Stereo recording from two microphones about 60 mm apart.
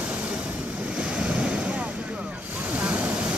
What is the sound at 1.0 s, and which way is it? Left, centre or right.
Waves, right.